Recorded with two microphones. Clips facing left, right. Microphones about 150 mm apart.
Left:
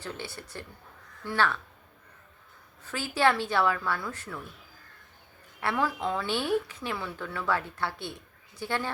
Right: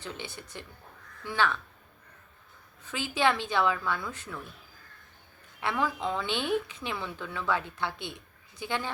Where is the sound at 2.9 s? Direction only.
20° right (ahead or behind).